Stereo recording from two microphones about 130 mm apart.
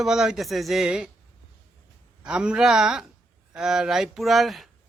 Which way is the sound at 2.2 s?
5° right (ahead or behind).